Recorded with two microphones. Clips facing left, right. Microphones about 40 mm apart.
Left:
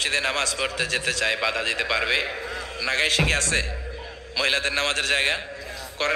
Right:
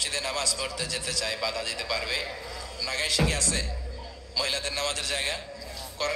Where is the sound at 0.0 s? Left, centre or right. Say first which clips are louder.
Left 6 dB; left.